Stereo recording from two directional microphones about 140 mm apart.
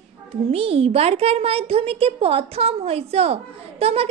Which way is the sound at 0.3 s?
45° right (ahead or behind).